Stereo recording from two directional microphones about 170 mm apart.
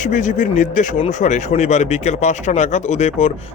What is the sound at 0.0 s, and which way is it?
Speech, 45° left (ahead or behind).